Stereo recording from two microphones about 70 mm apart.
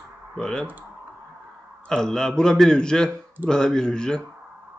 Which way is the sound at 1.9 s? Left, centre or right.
Centre.